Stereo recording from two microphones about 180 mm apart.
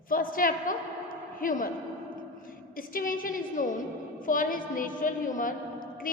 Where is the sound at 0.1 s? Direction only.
50° left (ahead or behind).